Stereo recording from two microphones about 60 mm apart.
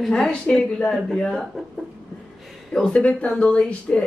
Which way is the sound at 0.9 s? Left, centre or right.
Centre.